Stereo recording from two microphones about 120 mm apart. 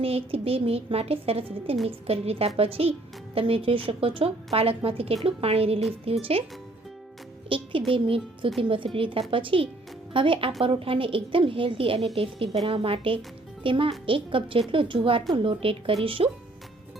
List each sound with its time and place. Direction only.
0.0 s a woman's voice: 55° right (ahead or behind)
7.5 s speech: 50° right (ahead or behind)